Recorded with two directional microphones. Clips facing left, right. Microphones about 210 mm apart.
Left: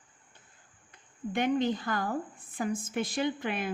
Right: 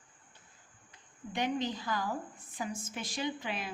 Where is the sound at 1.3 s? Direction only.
55° left (ahead or behind).